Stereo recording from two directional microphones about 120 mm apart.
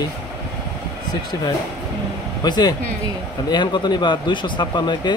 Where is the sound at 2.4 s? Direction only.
35° left (ahead or behind).